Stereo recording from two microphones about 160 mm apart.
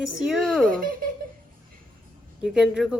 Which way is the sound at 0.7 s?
60° right (ahead or behind).